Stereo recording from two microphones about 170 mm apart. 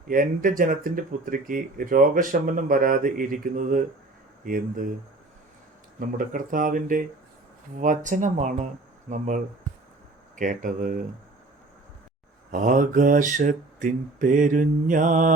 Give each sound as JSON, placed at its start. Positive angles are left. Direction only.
{"t": 0.1, "sound": "speech", "side_deg": -55}
{"t": 6.0, "sound": "speech", "side_deg": -55}
{"t": 12.5, "sound": "speech", "side_deg": -50}